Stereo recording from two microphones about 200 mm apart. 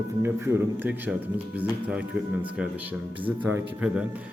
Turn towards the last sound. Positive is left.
turn(degrees=-10)  # may be behind; listen again after turning